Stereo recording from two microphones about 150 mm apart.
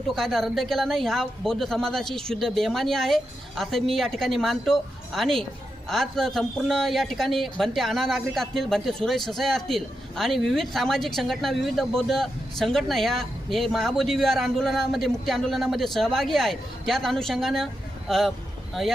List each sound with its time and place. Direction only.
0.1 s a man's voice: centre (ahead or behind)